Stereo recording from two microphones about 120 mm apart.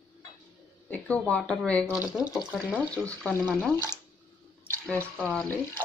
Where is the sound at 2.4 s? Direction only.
10° right (ahead or behind).